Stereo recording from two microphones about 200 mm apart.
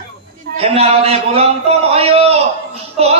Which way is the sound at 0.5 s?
30° right (ahead or behind).